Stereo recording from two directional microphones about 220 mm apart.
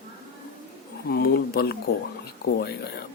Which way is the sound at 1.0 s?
45° left (ahead or behind).